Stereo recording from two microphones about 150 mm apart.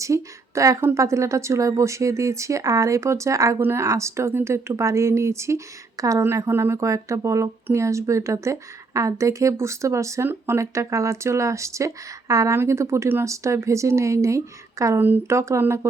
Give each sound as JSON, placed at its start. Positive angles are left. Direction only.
{"t": 0.0, "sound": "a woman's voice", "side_deg": -20}